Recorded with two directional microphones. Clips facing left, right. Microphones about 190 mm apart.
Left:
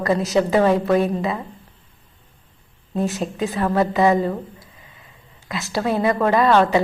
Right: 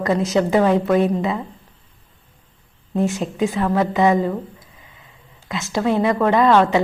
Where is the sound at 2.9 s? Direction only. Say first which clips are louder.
Right 2 dB; 15° right (ahead or behind).